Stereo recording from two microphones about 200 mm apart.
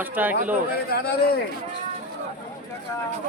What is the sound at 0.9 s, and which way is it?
Speech, 50° left (ahead or behind).